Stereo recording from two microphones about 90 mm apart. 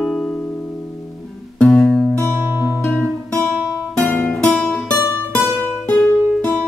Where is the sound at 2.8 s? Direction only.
10° left (ahead or behind).